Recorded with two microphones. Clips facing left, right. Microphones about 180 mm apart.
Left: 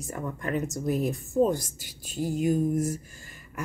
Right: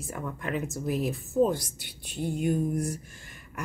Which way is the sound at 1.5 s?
40° left (ahead or behind).